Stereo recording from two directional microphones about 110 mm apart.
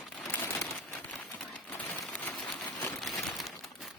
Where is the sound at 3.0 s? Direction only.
Centre (ahead or behind).